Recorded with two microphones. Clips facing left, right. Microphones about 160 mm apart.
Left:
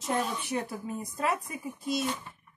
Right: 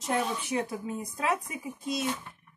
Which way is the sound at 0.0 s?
Centre (ahead or behind).